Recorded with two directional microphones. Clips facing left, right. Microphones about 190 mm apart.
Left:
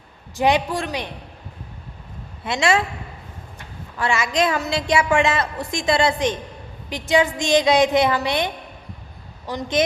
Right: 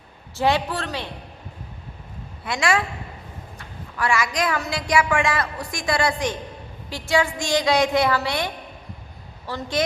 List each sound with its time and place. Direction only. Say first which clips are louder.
0.3 s a man's voice: left 2 dB; 15° left (ahead or behind)
2.4 s a woman's voice: left 3 dB; 25° left (ahead or behind)
3.9 s a woman's voice: left 2 dB; 25° left (ahead or behind)